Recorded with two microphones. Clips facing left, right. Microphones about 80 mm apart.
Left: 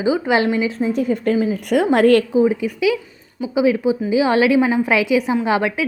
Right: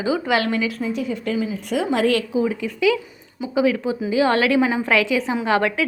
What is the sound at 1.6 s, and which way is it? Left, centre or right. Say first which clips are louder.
Speech: left 6 dB; left.